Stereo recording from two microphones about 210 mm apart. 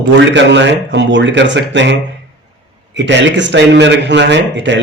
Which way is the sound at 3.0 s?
60° right (ahead or behind).